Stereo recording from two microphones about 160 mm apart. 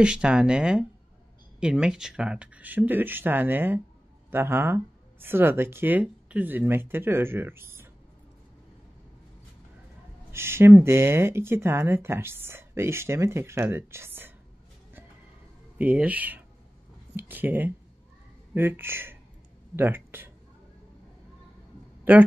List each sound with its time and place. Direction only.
0.0 s speech: 5° right (ahead or behind)
10.3 s speech: 15° right (ahead or behind)
15.8 s speech: 10° right (ahead or behind)
22.1 s speech: 10° right (ahead or behind)